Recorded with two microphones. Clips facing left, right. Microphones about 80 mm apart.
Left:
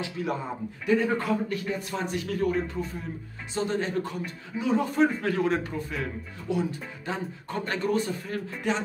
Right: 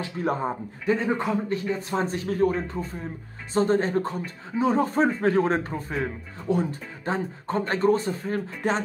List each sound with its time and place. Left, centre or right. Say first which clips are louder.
0.0 s a man's voice: right 4 dB; right
0.9 s a man's voice: left 3 dB; right